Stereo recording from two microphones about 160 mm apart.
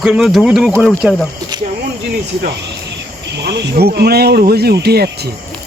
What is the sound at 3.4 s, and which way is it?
Speech, 85° right.